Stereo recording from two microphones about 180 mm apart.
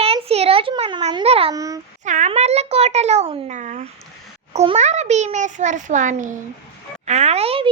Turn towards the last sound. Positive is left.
turn(degrees=-35)  # may be behind; listen again after turning